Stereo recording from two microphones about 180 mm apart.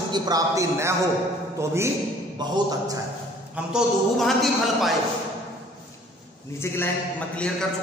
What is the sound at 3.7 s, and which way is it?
A man's voice, centre (ahead or behind).